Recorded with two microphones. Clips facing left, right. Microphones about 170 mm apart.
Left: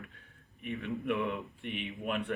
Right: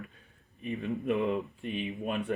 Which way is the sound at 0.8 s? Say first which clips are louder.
Right 3 dB; 20° right (ahead or behind).